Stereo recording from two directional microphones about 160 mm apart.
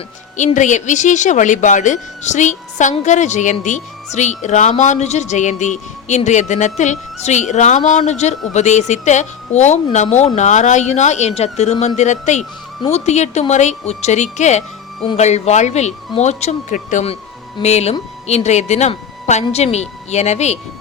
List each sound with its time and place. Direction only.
0.3 s a man's voice: 50° left (ahead or behind)